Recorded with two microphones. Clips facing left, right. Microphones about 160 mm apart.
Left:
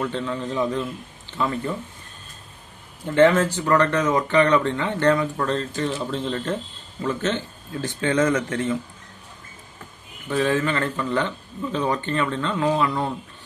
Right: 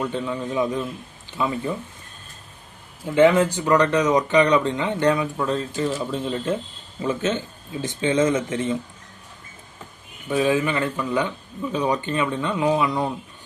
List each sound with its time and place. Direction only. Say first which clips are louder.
0.0 s speech: even; 10° right (ahead or behind)
3.2 s speech: right 1 dB; 15° right (ahead or behind)
10.3 s speech: right 1 dB; 15° right (ahead or behind)